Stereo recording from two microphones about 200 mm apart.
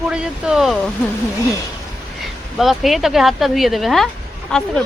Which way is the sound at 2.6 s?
Centre (ahead or behind).